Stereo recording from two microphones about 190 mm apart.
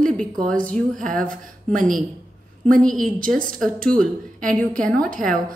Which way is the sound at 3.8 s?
5° left (ahead or behind).